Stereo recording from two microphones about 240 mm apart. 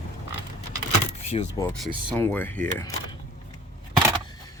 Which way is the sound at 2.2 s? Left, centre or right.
Centre.